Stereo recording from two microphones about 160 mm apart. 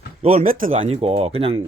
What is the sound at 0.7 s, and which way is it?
Speech, 40° right (ahead or behind).